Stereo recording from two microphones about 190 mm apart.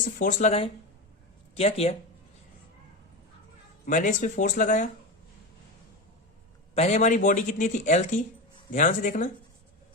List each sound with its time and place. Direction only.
0.0 s a man's voice: 45° left (ahead or behind)
3.8 s a man's voice: 40° left (ahead or behind)
6.7 s a man's voice: 35° left (ahead or behind)